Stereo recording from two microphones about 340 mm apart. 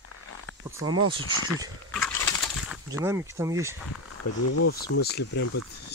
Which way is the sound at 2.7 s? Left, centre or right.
Centre.